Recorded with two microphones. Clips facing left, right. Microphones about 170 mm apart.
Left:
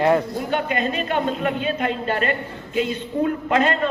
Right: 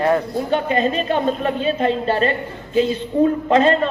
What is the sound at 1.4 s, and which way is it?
A man's voice, 30° right (ahead or behind).